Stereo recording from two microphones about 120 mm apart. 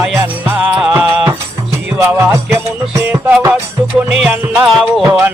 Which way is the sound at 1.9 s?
20° right (ahead or behind).